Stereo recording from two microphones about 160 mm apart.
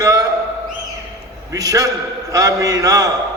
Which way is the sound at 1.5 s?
20° right (ahead or behind).